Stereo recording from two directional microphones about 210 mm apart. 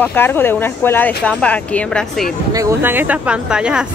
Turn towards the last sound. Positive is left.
turn(degrees=-5)  # may be behind; listen again after turning